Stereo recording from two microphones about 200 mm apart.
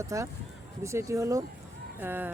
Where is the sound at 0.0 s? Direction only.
15° right (ahead or behind).